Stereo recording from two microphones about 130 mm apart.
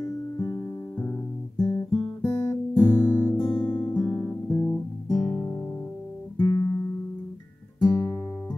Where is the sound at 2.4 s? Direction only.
20° left (ahead or behind).